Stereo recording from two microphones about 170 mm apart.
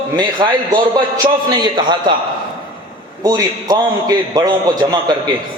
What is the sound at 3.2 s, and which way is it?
A man's voice, 20° right (ahead or behind).